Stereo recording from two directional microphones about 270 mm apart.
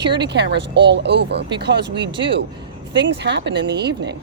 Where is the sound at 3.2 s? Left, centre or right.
Right.